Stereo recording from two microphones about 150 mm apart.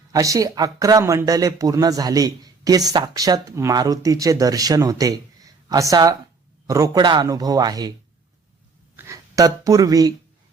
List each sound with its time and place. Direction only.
0.1 s speech: 20° right (ahead or behind)
9.0 s speech: 20° right (ahead or behind)